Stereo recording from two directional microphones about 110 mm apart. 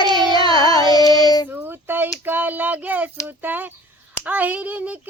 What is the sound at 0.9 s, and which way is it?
Child singing, 35° left (ahead or behind).